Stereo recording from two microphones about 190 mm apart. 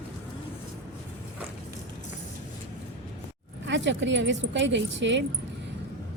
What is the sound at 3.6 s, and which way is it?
Speech, 70° right (ahead or behind).